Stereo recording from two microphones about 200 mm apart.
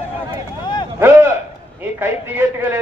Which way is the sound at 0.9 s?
10° right (ahead or behind).